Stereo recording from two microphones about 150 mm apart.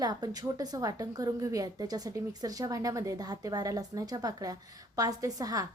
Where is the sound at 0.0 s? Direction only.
25° right (ahead or behind).